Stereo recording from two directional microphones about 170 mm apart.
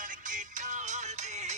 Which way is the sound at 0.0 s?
50° right (ahead or behind).